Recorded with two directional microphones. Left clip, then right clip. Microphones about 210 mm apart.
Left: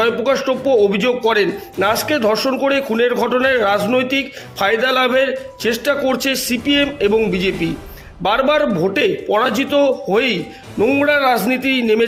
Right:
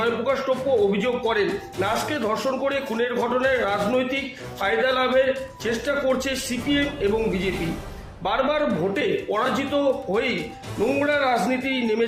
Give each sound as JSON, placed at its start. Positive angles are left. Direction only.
{"t": 0.0, "sound": "a man's voice", "side_deg": 50}